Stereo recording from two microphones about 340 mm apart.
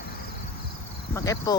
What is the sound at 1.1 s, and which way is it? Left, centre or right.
Speech, centre.